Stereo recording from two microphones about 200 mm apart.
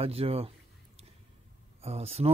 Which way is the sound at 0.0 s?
30° right (ahead or behind).